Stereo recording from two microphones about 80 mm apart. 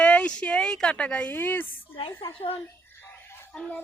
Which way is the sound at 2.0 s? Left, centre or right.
Left.